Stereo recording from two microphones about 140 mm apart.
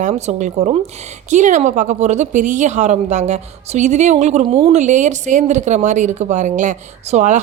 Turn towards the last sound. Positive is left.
turn(degrees=-55)  # may be behind; listen again after turning